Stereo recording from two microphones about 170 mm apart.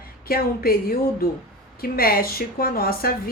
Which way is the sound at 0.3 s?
60° left (ahead or behind).